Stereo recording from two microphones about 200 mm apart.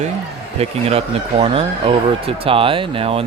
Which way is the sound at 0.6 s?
30° right (ahead or behind).